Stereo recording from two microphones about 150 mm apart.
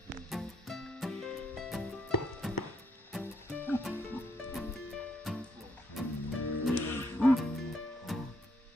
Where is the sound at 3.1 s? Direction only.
10° left (ahead or behind).